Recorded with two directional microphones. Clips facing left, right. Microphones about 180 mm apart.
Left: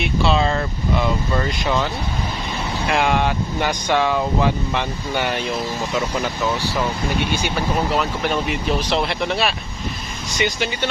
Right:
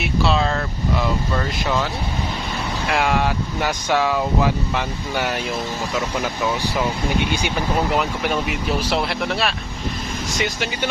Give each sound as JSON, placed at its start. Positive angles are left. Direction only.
{"t": 0.0, "sound": "speech", "side_deg": 0}
{"t": 2.9, "sound": "speech", "side_deg": 0}
{"t": 7.3, "sound": "speech", "side_deg": -15}